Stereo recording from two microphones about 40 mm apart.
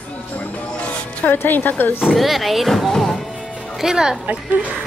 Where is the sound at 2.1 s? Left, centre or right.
Centre.